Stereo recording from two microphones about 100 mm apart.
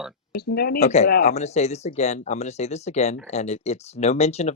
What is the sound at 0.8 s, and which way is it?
Speech, 90° left.